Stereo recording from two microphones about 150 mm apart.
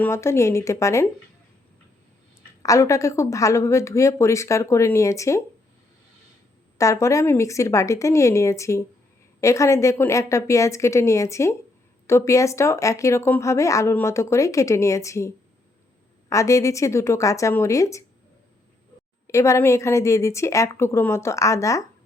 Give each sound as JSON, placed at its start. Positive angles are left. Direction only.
{"t": 0.0, "sound": "a woman's voice", "side_deg": 20}
{"t": 2.6, "sound": "a woman's voice", "side_deg": 20}
{"t": 6.7, "sound": "a woman's voice", "side_deg": 20}
{"t": 16.3, "sound": "a woman's voice", "side_deg": 20}
{"t": 19.3, "sound": "a woman's voice", "side_deg": 20}